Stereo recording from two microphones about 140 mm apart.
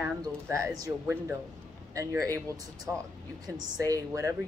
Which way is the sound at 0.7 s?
25° right (ahead or behind).